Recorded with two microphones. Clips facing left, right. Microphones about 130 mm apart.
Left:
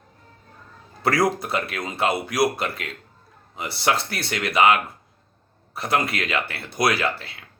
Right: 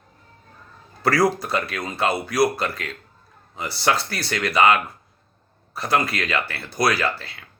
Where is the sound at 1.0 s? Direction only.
25° left (ahead or behind).